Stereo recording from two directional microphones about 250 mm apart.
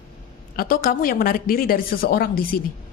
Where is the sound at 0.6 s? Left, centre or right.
Left.